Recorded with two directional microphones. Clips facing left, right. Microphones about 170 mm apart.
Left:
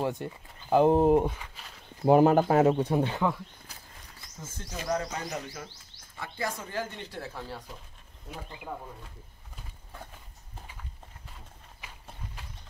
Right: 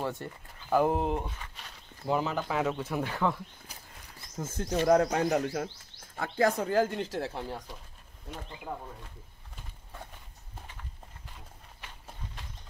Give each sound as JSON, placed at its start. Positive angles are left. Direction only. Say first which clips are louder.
{"t": 0.0, "sound": "speech", "louder": "left 4 dB", "side_deg": 15}
{"t": 0.9, "sound": "speech", "louder": "left 9 dB", "side_deg": 45}
{"t": 1.4, "sound": "speech", "louder": "even", "side_deg": 5}
{"t": 2.0, "sound": "speech", "louder": "left 10 dB", "side_deg": 50}
{"t": 2.7, "sound": "speech", "louder": "left 7 dB", "side_deg": 30}
{"t": 4.4, "sound": "speech", "louder": "right 10 dB", "side_deg": -60}
{"t": 7.3, "sound": "speech", "louder": "right 3 dB", "side_deg": -20}